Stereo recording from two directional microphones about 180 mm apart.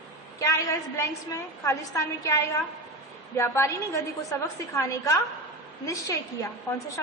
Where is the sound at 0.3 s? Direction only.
15° left (ahead or behind).